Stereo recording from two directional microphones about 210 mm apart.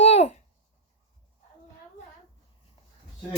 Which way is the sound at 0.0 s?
30° left (ahead or behind).